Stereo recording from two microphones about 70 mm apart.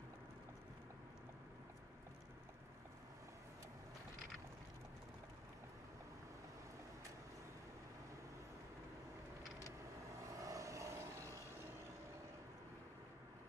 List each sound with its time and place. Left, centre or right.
10.3 s vehicle: right